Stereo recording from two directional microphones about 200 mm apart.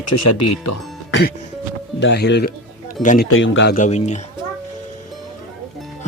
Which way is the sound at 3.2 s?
85° left.